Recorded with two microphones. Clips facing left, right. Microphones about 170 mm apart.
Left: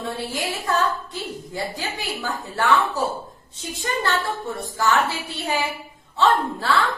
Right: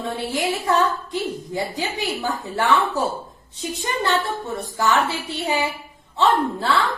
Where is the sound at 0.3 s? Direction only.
20° right (ahead or behind).